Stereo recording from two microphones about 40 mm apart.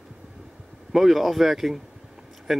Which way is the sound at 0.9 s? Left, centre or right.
Centre.